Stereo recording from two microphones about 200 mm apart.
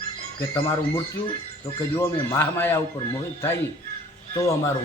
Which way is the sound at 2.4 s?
10° left (ahead or behind).